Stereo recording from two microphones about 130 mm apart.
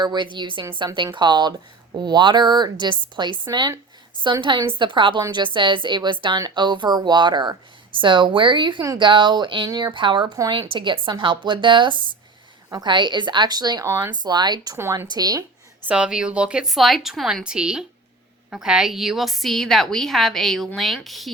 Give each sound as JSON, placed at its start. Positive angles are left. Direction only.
{"t": 0.0, "sound": "speech", "side_deg": -35}
{"t": 14.8, "sound": "speech", "side_deg": -20}
{"t": 15.0, "sound": "speech", "side_deg": -30}
{"t": 15.9, "sound": "a woman's voice", "side_deg": -5}